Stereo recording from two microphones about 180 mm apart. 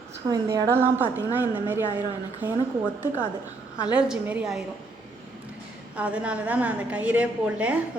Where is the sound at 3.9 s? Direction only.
5° right (ahead or behind).